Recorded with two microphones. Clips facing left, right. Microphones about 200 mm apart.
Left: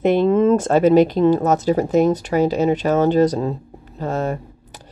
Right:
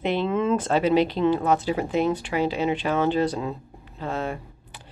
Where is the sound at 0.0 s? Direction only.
45° left (ahead or behind).